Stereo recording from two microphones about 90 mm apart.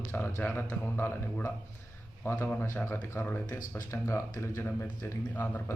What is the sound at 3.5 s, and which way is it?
Speech, 35° left (ahead or behind).